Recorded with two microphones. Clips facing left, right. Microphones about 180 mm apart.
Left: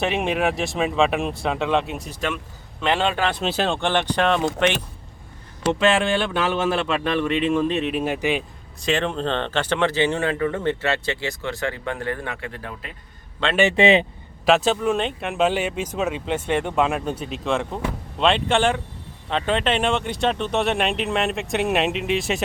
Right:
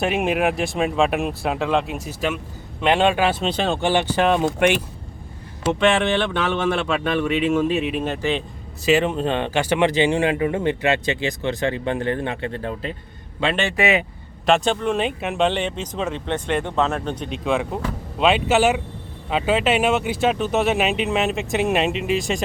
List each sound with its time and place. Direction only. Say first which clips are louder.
0.0 s speech: right 2 dB; centre (ahead or behind)
2.8 s speech: right 4 dB; 15° right (ahead or behind)
5.6 s speech: right 1 dB; 5° left (ahead or behind)
8.0 s speech: even; 10° left (ahead or behind)
8.8 s speech: right 4 dB; 5° right (ahead or behind); by 12.9 s 30° right (ahead or behind)
13.4 s speech: right 2 dB; 10° right (ahead or behind)
13.7 s speech: left 4 dB; 30° left (ahead or behind)
14.4 s speech: even; 5° left (ahead or behind)